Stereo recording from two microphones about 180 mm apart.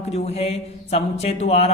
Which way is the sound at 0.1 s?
35° left (ahead or behind).